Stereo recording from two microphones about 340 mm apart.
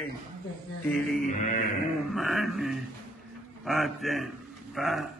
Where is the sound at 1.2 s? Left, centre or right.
Left.